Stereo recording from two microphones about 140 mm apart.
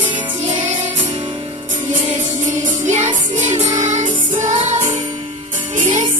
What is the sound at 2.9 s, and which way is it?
Music, 55° right (ahead or behind).